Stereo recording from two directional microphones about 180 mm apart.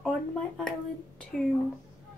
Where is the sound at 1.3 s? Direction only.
5° left (ahead or behind).